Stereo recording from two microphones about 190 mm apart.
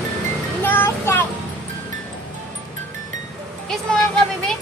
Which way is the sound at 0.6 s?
10° left (ahead or behind).